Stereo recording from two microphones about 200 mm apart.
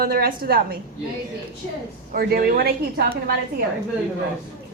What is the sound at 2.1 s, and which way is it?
A woman's voice, 50° right (ahead or behind).